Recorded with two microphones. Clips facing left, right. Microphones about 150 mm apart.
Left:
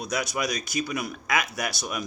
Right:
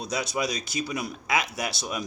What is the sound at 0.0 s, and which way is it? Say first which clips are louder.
Speech: even; 30° right (ahead or behind).